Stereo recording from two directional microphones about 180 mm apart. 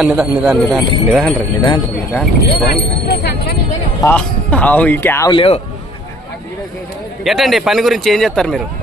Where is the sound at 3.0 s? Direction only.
70° left (ahead or behind).